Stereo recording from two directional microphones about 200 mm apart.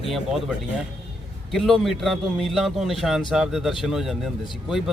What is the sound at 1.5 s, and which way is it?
A man's voice, centre (ahead or behind).